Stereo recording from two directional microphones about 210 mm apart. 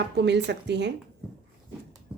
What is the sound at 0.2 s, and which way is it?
Speech, 55° right (ahead or behind).